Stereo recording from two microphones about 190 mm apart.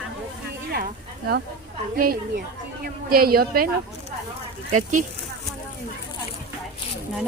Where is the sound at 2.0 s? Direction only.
50° right (ahead or behind).